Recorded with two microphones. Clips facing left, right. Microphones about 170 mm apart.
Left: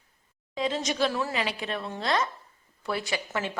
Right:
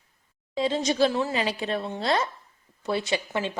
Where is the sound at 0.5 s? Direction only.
30° right (ahead or behind).